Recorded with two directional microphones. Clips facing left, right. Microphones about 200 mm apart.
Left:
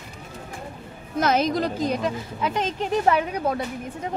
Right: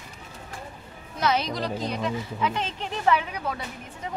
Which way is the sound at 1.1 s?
45° left (ahead or behind).